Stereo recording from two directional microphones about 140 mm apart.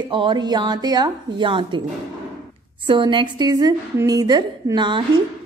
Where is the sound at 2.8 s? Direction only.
35° right (ahead or behind).